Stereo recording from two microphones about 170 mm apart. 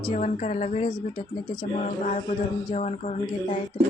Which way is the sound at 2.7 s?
40° left (ahead or behind).